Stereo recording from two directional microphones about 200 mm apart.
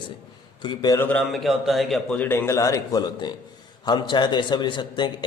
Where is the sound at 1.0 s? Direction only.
Centre (ahead or behind).